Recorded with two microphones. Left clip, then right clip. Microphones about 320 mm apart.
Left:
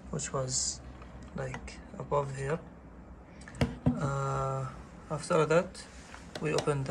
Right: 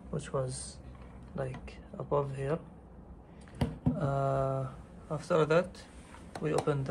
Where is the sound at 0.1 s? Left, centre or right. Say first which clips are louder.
Left 1 dB; centre.